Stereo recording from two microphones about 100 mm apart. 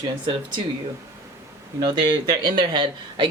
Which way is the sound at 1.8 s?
45° right (ahead or behind).